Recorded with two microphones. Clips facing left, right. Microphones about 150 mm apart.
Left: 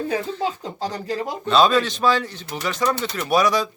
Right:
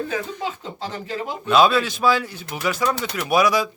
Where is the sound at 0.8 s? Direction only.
40° left (ahead or behind).